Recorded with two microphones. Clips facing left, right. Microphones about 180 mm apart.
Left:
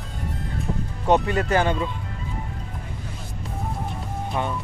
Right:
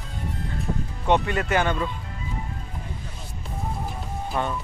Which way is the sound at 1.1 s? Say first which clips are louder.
Left 2 dB; 35° left (ahead or behind).